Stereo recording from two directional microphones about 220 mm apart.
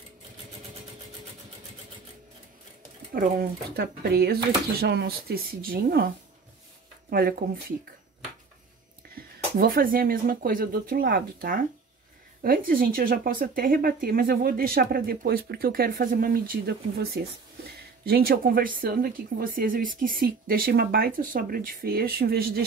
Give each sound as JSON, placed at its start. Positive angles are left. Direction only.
{"t": 3.1, "sound": "speech", "side_deg": -40}
{"t": 9.1, "sound": "speech", "side_deg": -40}